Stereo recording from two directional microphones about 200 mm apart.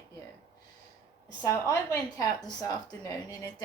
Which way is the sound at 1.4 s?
15° left (ahead or behind).